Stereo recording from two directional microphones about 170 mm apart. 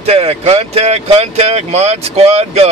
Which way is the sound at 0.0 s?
35° right (ahead or behind).